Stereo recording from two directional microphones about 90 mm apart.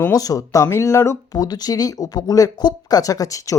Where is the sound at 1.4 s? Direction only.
45° left (ahead or behind).